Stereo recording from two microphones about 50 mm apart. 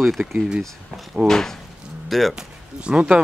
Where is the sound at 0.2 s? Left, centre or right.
Right.